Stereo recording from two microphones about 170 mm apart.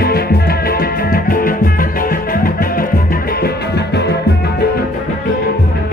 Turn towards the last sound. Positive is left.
turn(degrees=80)